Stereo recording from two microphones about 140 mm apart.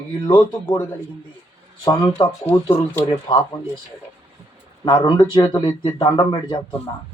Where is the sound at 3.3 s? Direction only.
30° left (ahead or behind).